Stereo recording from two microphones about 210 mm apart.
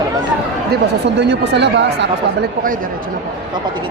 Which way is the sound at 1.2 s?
55° right (ahead or behind).